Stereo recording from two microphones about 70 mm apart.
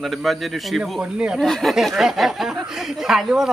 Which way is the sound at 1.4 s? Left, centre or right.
Centre.